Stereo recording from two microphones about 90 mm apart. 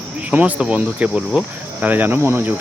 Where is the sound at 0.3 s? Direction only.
15° right (ahead or behind).